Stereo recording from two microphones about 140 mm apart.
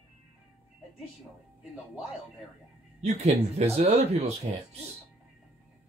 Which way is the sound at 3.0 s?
50° right (ahead or behind).